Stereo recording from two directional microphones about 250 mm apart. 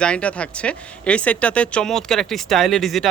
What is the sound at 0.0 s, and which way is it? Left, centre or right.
Speech, centre.